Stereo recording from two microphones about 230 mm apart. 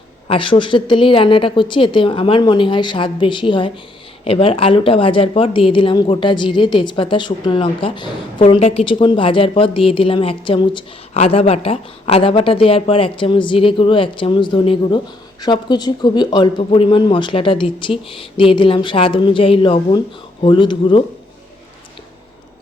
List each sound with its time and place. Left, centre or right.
0.3 s speech: left